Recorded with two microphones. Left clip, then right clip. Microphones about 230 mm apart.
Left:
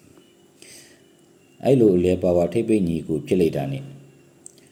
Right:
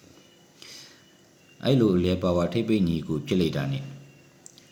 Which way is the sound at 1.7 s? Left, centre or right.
Centre.